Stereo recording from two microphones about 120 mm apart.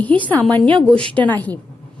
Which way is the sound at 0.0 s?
15° left (ahead or behind).